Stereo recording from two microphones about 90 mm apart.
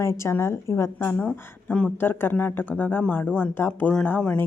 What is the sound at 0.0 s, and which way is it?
Speech, 30° left (ahead or behind).